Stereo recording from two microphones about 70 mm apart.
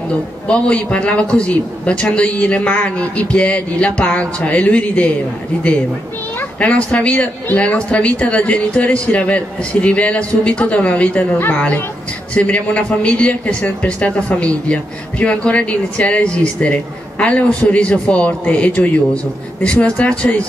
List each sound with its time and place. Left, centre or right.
0.5 s a man's voice: centre
6.6 s a man's voice: centre